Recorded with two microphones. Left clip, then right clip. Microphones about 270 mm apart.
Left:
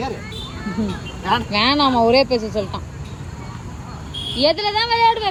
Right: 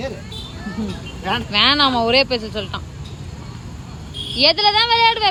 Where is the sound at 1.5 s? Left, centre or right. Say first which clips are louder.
Right 4 dB; centre.